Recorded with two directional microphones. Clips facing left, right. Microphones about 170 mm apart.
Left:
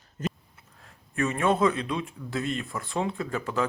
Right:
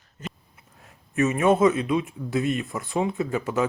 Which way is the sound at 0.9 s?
15° right (ahead or behind).